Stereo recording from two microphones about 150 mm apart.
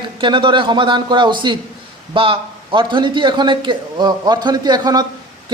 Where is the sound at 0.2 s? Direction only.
35° right (ahead or behind).